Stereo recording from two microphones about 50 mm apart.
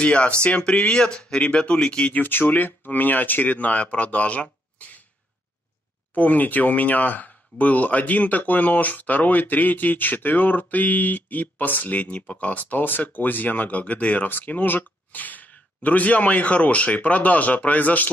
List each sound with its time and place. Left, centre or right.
0.0 s speech: left
2.2 s speech: left
6.1 s speech: left